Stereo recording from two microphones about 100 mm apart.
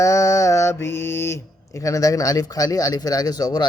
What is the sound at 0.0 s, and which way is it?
Mantra, 30° left (ahead or behind).